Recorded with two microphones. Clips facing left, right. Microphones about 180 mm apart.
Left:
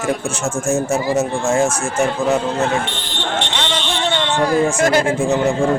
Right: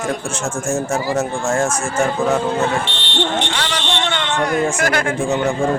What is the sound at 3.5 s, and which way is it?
Speech, 25° left (ahead or behind).